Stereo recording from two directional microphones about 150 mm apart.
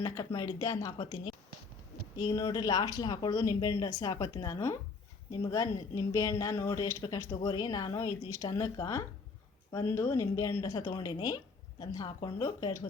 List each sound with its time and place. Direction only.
0.0 s a woman's voice: 25° left (ahead or behind)